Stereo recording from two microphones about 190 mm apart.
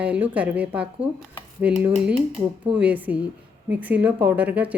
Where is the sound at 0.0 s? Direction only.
5° right (ahead or behind).